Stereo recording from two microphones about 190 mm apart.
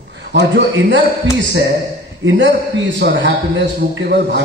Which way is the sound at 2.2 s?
75° right (ahead or behind).